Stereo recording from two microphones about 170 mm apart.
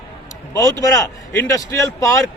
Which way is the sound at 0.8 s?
20° left (ahead or behind).